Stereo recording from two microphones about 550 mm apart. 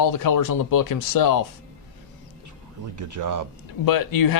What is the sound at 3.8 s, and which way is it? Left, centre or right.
Speech, left.